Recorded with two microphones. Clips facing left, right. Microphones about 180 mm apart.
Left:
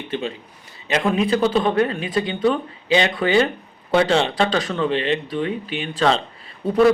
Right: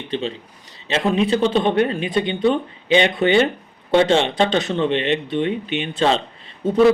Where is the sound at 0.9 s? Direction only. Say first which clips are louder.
Right 1 dB; 25° right (ahead or behind).